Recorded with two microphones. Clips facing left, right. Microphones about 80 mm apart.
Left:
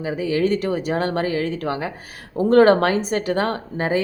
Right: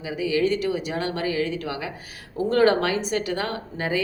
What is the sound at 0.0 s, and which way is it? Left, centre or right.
Speech, left.